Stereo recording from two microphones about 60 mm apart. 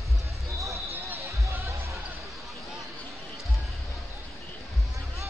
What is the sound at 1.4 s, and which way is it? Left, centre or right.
Basketball bounce, right.